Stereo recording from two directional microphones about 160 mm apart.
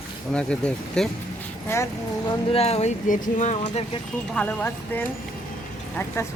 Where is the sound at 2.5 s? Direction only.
40° left (ahead or behind).